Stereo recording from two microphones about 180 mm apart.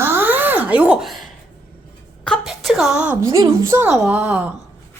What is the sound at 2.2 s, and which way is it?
A woman's voice, centre (ahead or behind).